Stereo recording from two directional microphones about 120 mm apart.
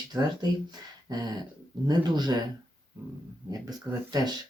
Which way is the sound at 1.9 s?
35° right (ahead or behind).